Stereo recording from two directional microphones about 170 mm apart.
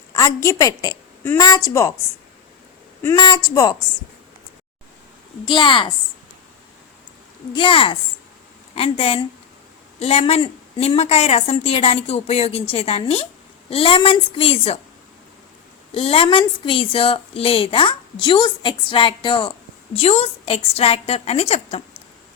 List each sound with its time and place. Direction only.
0.1 s a woman's voice: 20° left (ahead or behind)
3.2 s speech: 25° left (ahead or behind)
5.5 s speech: 30° left (ahead or behind)
7.5 s a woman's voice: 30° left (ahead or behind)
16.0 s a woman's voice: 35° left (ahead or behind)